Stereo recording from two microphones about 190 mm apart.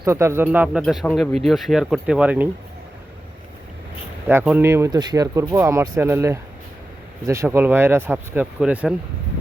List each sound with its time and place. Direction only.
0.0 s speech: 15° right (ahead or behind)
4.3 s speech: 10° right (ahead or behind)